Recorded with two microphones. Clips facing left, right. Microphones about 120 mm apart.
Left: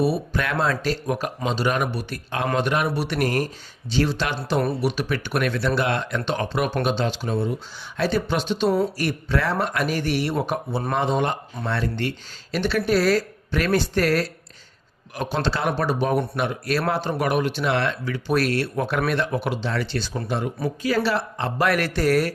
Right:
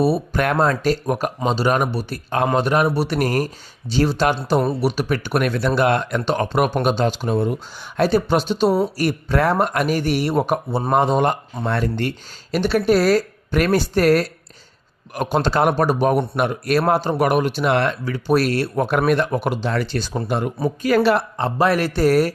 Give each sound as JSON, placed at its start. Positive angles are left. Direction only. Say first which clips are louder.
{"t": 0.0, "sound": "speech", "louder": "right 4 dB", "side_deg": -40}
{"t": 7.9, "sound": "a woman's voice", "louder": "right 6 dB", "side_deg": -45}
{"t": 21.3, "sound": "speech", "louder": "right 4 dB", "side_deg": -35}